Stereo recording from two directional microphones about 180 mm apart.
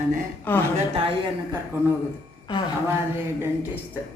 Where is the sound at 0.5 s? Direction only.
10° left (ahead or behind).